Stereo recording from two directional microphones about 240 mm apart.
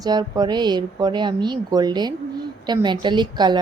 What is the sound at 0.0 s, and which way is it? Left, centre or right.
A woman's voice, centre.